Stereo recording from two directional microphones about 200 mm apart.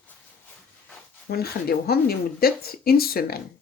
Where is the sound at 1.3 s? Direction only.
50° left (ahead or behind).